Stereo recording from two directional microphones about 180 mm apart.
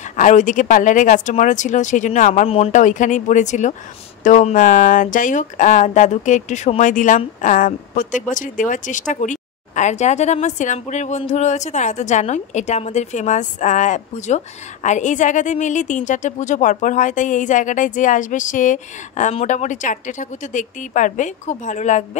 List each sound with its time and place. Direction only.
0.1 s speech: 45° left (ahead or behind)